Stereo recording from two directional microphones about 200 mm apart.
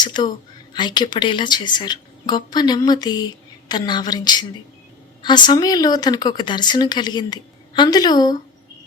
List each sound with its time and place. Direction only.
0.0 s speech: 20° left (ahead or behind)